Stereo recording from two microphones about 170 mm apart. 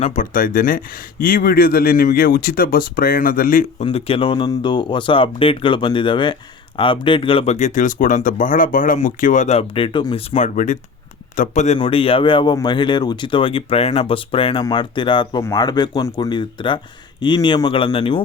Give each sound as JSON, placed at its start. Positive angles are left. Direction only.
{"t": 0.0, "sound": "speech", "side_deg": 50}
{"t": 3.8, "sound": "speech", "side_deg": 35}
{"t": 10.3, "sound": "speech", "side_deg": 45}
{"t": 11.8, "sound": "speech", "side_deg": 35}